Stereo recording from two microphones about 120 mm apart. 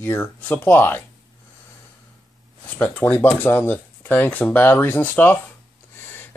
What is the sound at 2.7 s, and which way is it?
Speech, 15° left (ahead or behind).